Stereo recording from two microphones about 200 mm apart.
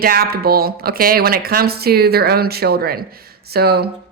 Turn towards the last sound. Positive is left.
turn(degrees=-50)  # may be behind; listen again after turning